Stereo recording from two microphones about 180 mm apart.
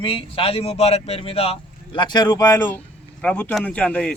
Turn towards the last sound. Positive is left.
turn(degrees=5)  # may be behind; listen again after turning